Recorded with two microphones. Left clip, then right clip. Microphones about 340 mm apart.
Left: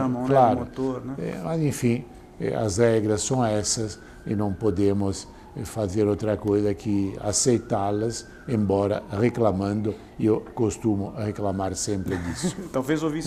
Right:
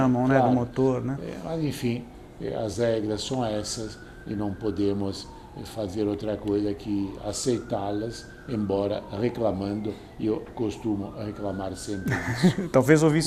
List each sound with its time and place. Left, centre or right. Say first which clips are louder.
0.3 s speech: left 6 dB; left
0.8 s speech: right 4 dB; right
1.2 s speech: left 3 dB; left
12.0 s speech: right 3 dB; right